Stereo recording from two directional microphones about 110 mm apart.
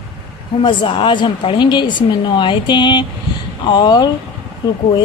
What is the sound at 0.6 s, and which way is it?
A woman's voice, 50° left (ahead or behind).